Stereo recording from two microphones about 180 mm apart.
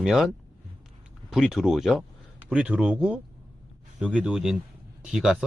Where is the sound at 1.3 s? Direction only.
Centre (ahead or behind).